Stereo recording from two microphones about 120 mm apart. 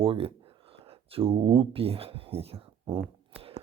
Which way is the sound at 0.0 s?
50° right (ahead or behind).